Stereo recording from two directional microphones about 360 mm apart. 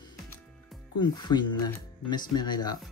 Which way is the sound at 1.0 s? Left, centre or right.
Centre.